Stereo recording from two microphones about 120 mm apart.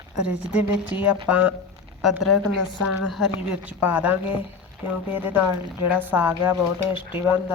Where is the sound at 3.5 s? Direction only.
15° right (ahead or behind).